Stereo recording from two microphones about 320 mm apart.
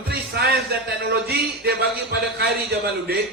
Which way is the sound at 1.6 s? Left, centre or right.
Right.